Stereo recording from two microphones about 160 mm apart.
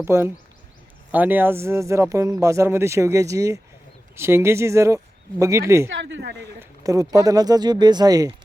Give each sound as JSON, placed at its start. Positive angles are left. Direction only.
{"t": 0.0, "sound": "speech", "side_deg": -15}